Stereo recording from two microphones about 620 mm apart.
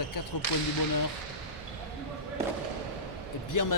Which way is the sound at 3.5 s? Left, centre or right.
Left.